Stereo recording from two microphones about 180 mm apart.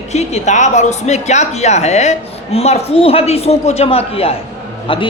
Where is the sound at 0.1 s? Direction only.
40° left (ahead or behind).